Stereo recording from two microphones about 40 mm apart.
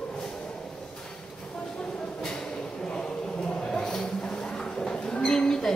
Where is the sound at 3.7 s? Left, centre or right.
Centre.